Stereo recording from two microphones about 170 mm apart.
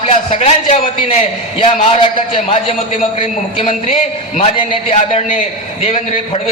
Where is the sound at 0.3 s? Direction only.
40° left (ahead or behind).